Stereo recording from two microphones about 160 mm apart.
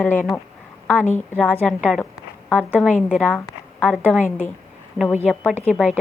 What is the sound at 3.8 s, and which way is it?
Speech, 5° left (ahead or behind).